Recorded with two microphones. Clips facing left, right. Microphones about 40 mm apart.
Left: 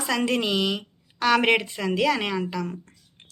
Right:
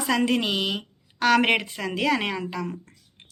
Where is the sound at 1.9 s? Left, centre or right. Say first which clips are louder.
Left 1 dB; right.